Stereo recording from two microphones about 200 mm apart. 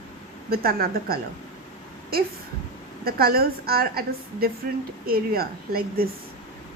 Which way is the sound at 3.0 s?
50° right (ahead or behind).